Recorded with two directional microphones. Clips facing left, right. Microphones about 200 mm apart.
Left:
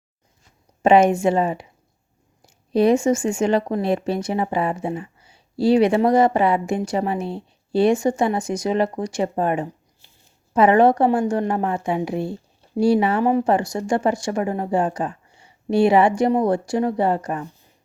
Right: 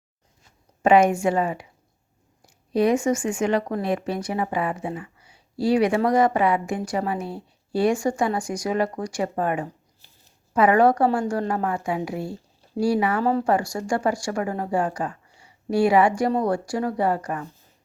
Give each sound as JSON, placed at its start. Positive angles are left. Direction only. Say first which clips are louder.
{"t": 0.8, "sound": "speech", "louder": "left 2 dB", "side_deg": 25}